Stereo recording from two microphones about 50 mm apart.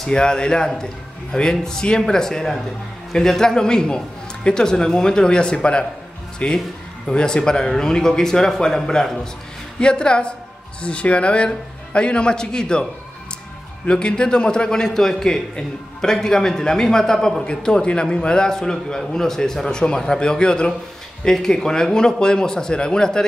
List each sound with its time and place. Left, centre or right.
0.0 s a man's voice: centre
7.1 s a man's voice: centre
13.8 s a man's voice: centre